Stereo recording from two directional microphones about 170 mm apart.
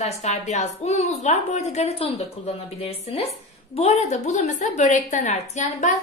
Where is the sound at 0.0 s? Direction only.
40° left (ahead or behind).